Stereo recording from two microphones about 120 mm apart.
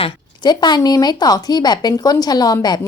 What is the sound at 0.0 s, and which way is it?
Speech, 40° left (ahead or behind).